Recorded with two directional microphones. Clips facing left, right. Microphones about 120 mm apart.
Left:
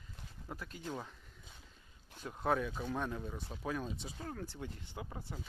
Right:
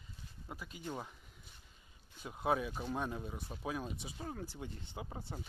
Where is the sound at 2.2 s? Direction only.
10° right (ahead or behind).